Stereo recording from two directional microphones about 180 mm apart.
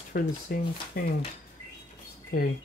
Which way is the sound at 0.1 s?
55° left (ahead or behind).